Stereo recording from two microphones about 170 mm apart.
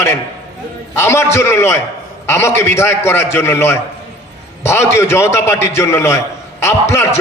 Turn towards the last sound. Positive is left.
turn(degrees=15)  # may be behind; listen again after turning